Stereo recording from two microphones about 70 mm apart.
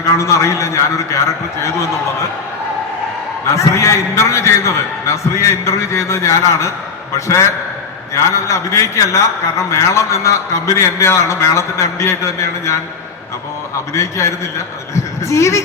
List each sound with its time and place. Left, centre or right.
0.0 s a man's voice: left
3.5 s a man's voice: left
8.1 s a man's voice: left
13.9 s a man's voice: left